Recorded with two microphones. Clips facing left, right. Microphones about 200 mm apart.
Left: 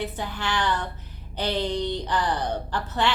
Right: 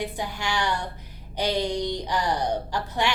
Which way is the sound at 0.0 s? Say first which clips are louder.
Even; 15° right (ahead or behind).